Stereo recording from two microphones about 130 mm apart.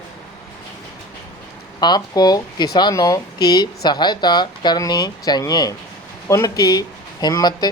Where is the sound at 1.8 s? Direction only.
35° left (ahead or behind).